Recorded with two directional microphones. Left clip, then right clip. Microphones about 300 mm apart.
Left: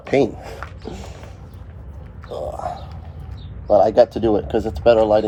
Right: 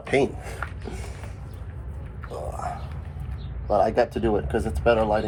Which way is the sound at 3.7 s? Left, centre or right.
Left.